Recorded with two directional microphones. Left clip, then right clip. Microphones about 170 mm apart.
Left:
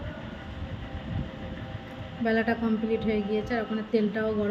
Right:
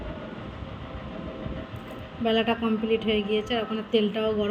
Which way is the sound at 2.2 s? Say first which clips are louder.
Right 2 dB; 15° right (ahead or behind).